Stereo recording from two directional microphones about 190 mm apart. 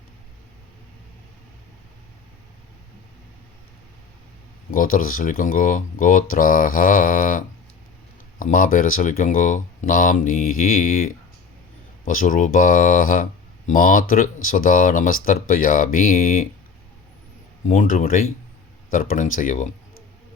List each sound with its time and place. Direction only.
4.7 s speech: 45° left (ahead or behind)
12.0 s speech: 45° left (ahead or behind)
17.7 s speech: 45° left (ahead or behind)